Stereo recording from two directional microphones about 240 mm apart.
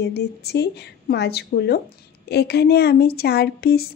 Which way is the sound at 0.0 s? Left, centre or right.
Left.